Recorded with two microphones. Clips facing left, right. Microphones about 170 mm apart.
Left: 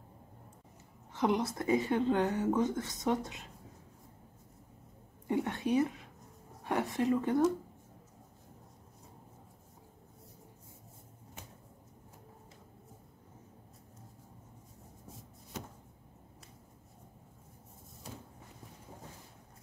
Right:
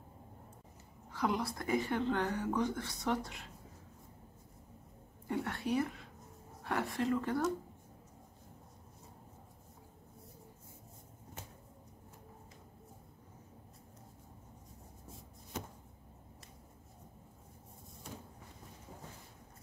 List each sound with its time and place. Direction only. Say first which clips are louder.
1.1 s speech: left 4 dB; 20° left (ahead or behind)
5.3 s speech: left 4 dB; 20° left (ahead or behind)